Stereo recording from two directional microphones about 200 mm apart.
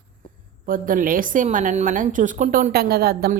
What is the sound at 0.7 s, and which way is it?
A woman's voice, 45° right (ahead or behind).